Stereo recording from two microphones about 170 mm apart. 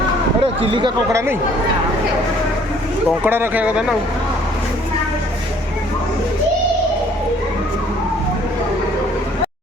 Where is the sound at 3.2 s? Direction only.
10° right (ahead or behind).